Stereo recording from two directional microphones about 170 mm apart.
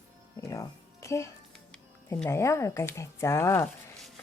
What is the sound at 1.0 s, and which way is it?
Speech, 15° left (ahead or behind).